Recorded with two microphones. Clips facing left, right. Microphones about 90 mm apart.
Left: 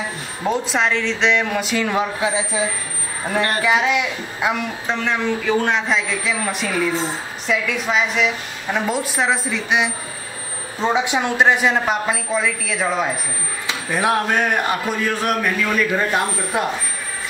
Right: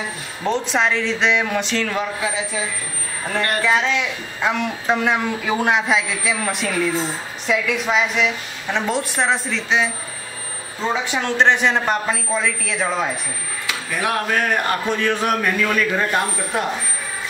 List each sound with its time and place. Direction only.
0.4 s a woman's voice: 5° left (ahead or behind)
1.9 s speech: 20° left (ahead or behind)
3.6 s a woman's voice: 10° left (ahead or behind)
13.7 s speech: 25° left (ahead or behind); by 16.6 s 5° left (ahead or behind)